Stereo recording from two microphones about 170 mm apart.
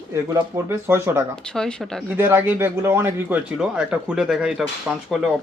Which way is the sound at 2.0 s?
15° right (ahead or behind).